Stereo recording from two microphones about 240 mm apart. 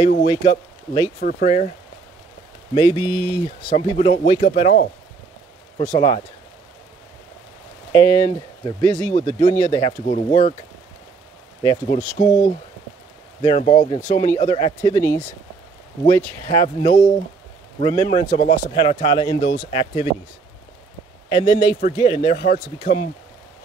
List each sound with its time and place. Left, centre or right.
0.2 s speech: left
1.2 s speech: left
2.7 s speech: centre
7.9 s speech: centre
11.6 s speech: centre
13.4 s speech: left
16.4 s speech: left
21.3 s speech: left